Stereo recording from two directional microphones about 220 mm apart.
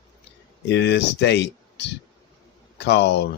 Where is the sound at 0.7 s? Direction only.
50° left (ahead or behind).